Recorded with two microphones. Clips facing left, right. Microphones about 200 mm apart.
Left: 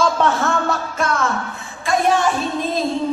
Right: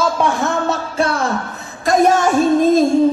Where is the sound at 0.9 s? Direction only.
35° right (ahead or behind).